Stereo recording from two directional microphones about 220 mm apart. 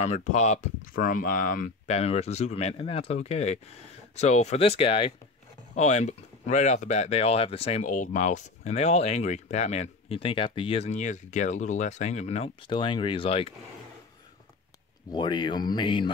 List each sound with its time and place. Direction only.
0.0 s speech: 30° left (ahead or behind)
15.0 s speech: 20° left (ahead or behind)